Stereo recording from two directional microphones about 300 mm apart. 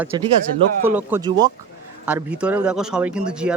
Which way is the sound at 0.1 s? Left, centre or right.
Centre.